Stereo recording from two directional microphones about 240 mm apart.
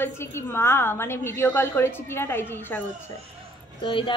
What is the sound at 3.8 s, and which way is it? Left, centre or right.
Speech, left.